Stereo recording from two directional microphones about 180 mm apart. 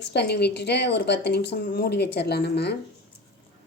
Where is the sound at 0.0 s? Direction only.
70° left (ahead or behind).